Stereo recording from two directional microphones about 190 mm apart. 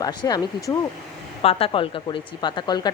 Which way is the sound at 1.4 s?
30° left (ahead or behind).